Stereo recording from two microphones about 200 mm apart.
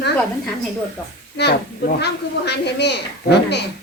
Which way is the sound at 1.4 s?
55° left (ahead or behind).